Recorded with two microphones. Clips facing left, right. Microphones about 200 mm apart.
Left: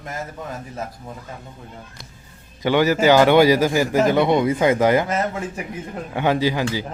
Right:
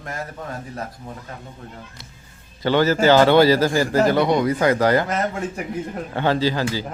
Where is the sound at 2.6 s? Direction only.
15° left (ahead or behind).